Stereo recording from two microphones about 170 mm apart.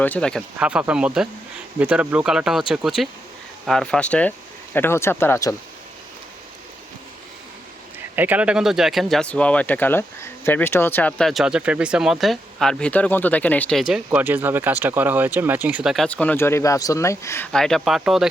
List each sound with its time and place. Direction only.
0.0 s speech: 5° left (ahead or behind)
0.6 s speech: 5° right (ahead or behind); by 5.5 s 15° left (ahead or behind)
7.9 s speech: 10° right (ahead or behind)
16.0 s speech: 10° left (ahead or behind)
17.5 s speech: 5° left (ahead or behind)